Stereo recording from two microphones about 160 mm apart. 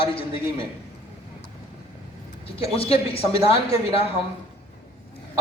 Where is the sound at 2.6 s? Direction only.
40° left (ahead or behind).